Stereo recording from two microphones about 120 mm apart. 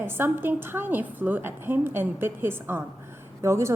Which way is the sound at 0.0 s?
20° right (ahead or behind).